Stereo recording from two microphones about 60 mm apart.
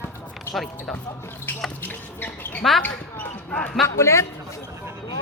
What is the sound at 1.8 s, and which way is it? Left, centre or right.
Speech, left.